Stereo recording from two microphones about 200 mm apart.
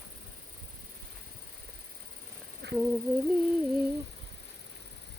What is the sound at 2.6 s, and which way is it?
Humming, 55° right (ahead or behind).